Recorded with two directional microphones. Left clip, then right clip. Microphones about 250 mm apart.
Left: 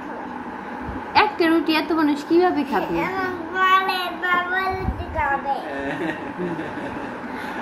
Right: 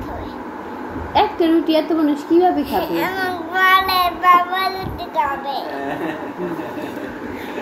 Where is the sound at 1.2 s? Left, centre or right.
Centre.